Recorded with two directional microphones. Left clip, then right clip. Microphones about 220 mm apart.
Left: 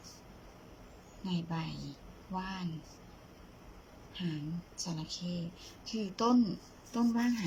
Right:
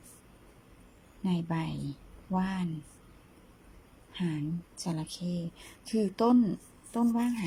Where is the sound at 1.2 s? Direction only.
25° right (ahead or behind).